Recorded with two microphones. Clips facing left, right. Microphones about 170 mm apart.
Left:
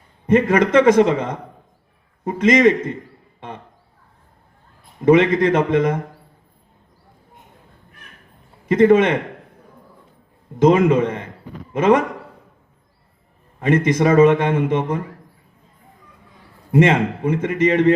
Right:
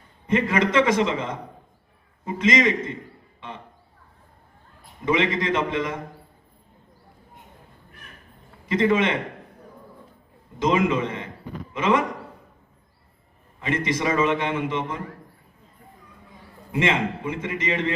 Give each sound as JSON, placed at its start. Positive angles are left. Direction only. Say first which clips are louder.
{"t": 0.3, "sound": "a man's voice", "louder": "left 7 dB", "side_deg": 50}
{"t": 5.0, "sound": "a man's voice", "louder": "left 9 dB", "side_deg": 50}
{"t": 8.6, "sound": "a man's voice", "louder": "left 8 dB", "side_deg": 50}
{"t": 10.6, "sound": "a man's voice", "louder": "left 8 dB", "side_deg": 50}
{"t": 13.6, "sound": "a man's voice", "louder": "left 9 dB", "side_deg": 50}
{"t": 16.7, "sound": "a man's voice", "louder": "left 8 dB", "side_deg": 50}